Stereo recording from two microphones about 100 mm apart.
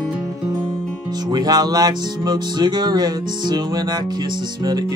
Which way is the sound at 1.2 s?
40° right (ahead or behind).